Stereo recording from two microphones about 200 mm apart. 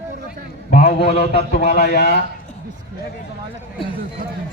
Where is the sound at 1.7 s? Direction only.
55° left (ahead or behind).